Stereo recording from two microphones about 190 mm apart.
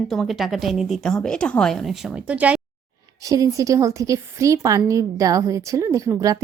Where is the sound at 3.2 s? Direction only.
20° right (ahead or behind).